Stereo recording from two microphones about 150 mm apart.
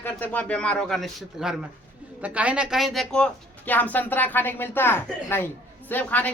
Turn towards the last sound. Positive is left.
turn(degrees=10)  # may be behind; listen again after turning